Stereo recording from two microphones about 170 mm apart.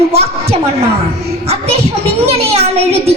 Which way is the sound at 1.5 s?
35° right (ahead or behind).